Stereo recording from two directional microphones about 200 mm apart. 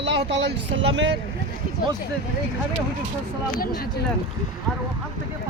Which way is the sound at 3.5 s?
50° left (ahead or behind).